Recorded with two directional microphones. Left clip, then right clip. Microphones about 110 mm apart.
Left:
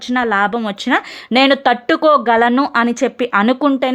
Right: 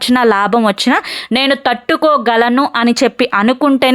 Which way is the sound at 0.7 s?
40° right (ahead or behind).